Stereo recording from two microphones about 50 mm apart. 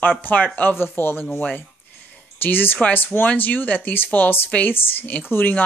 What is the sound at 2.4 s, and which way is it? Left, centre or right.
Speech, left.